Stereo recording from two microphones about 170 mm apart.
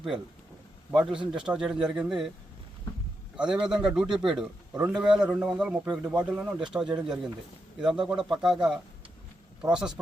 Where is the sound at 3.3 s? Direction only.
5° right (ahead or behind).